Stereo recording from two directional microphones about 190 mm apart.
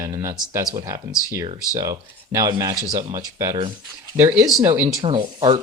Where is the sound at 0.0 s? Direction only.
15° right (ahead or behind).